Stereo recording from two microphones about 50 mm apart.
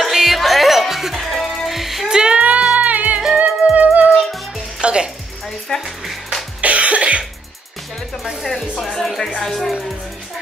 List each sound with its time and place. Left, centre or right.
0.0 s music: centre
1.7 s music: centre
2.0 s music: centre
2.7 s music: right
4.1 s music: centre
4.8 s music: centre
5.5 s music: centre
6.6 s cough: right
8.2 s music: centre
8.9 s music: centre